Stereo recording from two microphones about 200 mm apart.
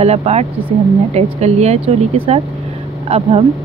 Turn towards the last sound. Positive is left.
turn(degrees=-30)  # may be behind; listen again after turning